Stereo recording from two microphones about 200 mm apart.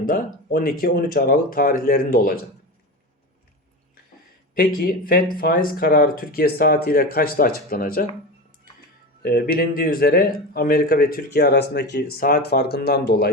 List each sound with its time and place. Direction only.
0.0 s speech: 45° left (ahead or behind)
4.5 s speech: 50° left (ahead or behind)
9.2 s speech: 50° left (ahead or behind)